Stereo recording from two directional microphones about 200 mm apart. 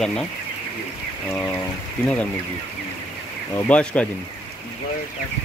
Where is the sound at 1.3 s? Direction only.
10° left (ahead or behind).